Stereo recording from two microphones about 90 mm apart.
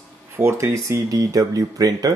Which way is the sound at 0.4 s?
30° right (ahead or behind).